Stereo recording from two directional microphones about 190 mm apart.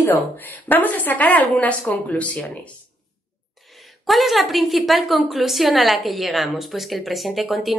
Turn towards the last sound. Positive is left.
turn(degrees=0)  # may be behind; listen again after turning